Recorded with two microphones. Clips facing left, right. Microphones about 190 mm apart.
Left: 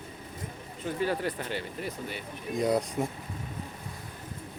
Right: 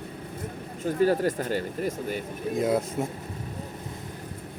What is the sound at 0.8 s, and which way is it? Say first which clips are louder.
Speech: right 7 dB; 40° right (ahead or behind).